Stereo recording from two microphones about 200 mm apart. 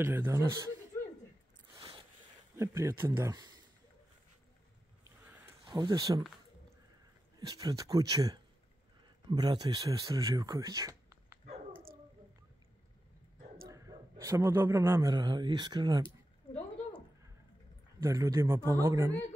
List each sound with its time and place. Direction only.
0.0 s speech: 10° right (ahead or behind)
1.8 s a sound: 25° right (ahead or behind)
2.5 s speech: 15° right (ahead or behind)
5.0 s a sound: 10° right (ahead or behind)
5.7 s speech: 20° right (ahead or behind)
7.3 s speech: 20° right (ahead or behind)
13.7 s speech: 15° right (ahead or behind)
18.0 s speech: 15° right (ahead or behind)